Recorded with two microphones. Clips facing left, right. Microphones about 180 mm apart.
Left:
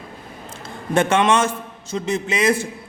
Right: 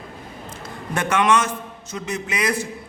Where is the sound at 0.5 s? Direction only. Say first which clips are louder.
Left 8 dB; 25° left (ahead or behind).